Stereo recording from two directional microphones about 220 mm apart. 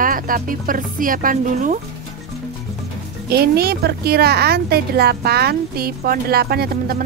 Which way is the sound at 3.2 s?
45° right (ahead or behind).